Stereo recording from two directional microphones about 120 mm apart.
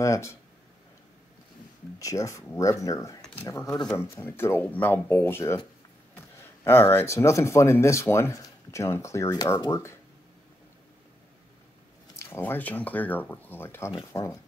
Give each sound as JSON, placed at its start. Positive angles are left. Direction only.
{"t": 0.0, "sound": "speech", "side_deg": 25}
{"t": 2.0, "sound": "speech", "side_deg": 25}
{"t": 12.2, "sound": "speech", "side_deg": 20}